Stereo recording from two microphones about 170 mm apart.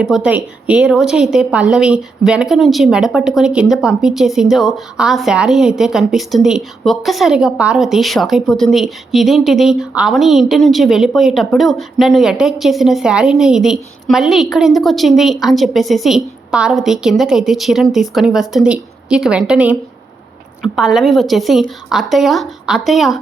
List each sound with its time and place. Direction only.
0.0 s a woman's voice: 5° right (ahead or behind)